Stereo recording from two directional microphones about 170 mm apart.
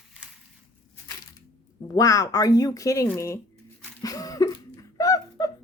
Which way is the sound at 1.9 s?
20° left (ahead or behind).